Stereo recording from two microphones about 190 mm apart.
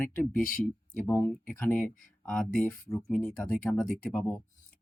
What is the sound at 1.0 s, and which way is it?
Speech, 15° left (ahead or behind).